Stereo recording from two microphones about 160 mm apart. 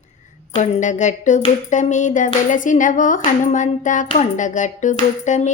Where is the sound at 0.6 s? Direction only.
50° left (ahead or behind).